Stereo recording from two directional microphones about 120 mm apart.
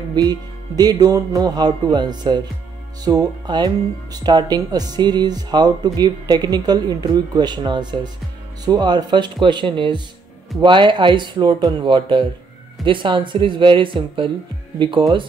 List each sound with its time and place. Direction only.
0.1 s speech: 35° right (ahead or behind)